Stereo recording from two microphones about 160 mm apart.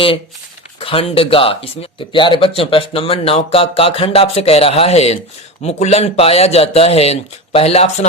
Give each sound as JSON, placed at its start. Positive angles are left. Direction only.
{"t": 0.8, "sound": "speech", "side_deg": 35}